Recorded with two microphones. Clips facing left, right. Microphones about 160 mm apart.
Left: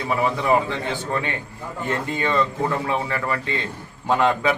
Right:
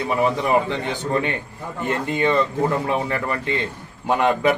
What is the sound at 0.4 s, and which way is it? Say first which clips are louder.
Speech: even; 20° right (ahead or behind).